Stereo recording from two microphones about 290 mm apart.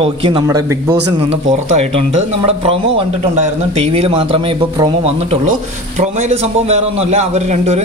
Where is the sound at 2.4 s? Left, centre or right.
Centre.